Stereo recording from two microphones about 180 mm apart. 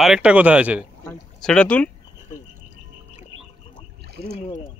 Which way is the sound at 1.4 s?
5° left (ahead or behind).